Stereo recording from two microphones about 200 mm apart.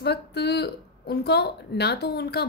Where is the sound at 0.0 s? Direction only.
55° left (ahead or behind).